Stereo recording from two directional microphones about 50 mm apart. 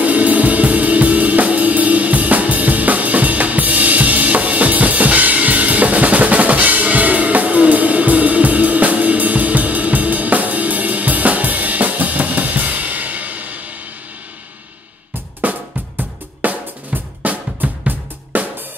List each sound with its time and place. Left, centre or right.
0.0 s music: right
15.4 s drum kit: right